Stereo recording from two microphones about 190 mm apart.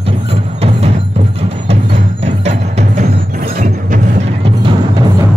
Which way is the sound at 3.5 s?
45° right (ahead or behind).